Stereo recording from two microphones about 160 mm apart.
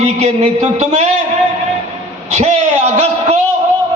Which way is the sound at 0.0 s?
45° right (ahead or behind).